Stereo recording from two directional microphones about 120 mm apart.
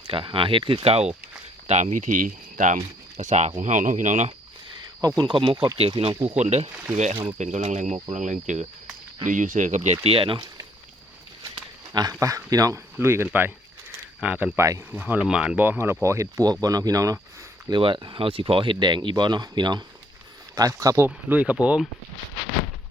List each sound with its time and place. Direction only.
0.1 s speech: 45° right (ahead or behind)
1.6 s speech: 75° right (ahead or behind)
5.0 s speech: 35° right (ahead or behind)
6.4 s speech: 65° right (ahead or behind)
8.1 s speech: 90° right; by 10.4 s 50° right (ahead or behind)
11.5 s speech: 35° right (ahead or behind); by 15.8 s 10° right (ahead or behind)
16.0 s speech: 25° right (ahead or behind)
17.7 s speech: 45° right (ahead or behind); by 21.8 s 10° right (ahead or behind)